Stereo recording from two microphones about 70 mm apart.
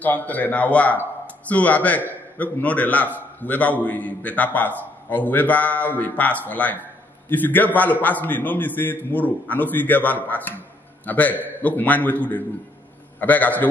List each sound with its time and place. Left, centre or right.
0.0 s speech: left